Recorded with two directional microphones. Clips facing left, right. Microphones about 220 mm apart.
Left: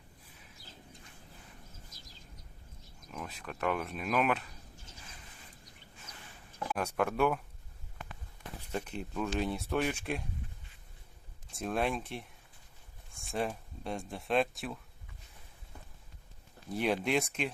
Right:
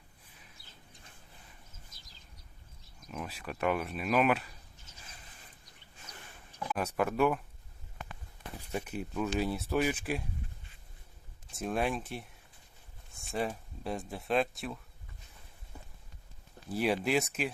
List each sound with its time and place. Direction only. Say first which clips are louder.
3.1 s speech: right 2 dB; 5° right (ahead or behind)
6.7 s speech: right 1 dB; 5° right (ahead or behind)
8.7 s speech: right 1 dB; 5° right (ahead or behind)
11.5 s speech: even; centre (ahead or behind)
13.3 s speech: even; centre (ahead or behind)
16.6 s speech: right 1 dB; 5° right (ahead or behind)